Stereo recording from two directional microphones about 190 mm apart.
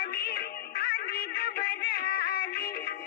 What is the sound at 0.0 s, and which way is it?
Music, 55° left (ahead or behind).